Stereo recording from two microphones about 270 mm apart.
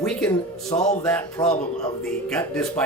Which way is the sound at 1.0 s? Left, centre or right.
Centre.